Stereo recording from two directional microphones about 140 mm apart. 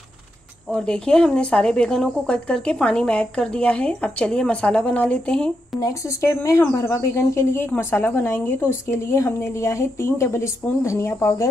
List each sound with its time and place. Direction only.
0.7 s speech: 5° left (ahead or behind)
5.8 s speech: 25° left (ahead or behind)